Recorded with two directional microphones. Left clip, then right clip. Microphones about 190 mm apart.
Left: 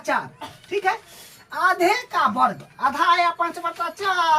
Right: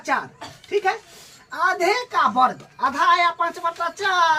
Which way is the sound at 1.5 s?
20° left (ahead or behind).